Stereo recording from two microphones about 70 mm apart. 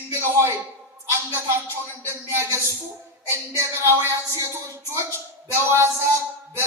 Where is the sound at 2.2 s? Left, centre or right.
Right.